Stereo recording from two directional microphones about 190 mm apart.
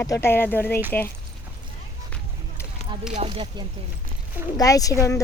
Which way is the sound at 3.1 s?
30° right (ahead or behind).